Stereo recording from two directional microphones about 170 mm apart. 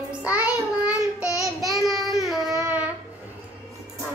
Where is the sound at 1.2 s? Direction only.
20° left (ahead or behind).